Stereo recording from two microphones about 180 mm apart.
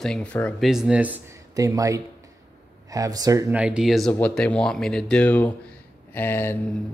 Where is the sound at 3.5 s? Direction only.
5° right (ahead or behind).